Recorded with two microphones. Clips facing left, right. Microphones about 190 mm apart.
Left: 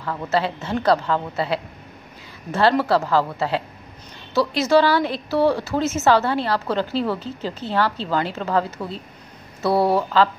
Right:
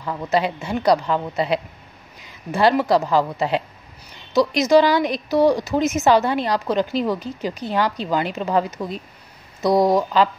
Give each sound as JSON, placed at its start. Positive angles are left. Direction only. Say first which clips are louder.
{"t": 0.0, "sound": "a woman's voice", "louder": "right 1 dB", "side_deg": -15}